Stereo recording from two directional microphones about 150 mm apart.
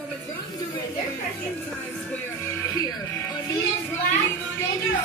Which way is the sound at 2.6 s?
20° left (ahead or behind).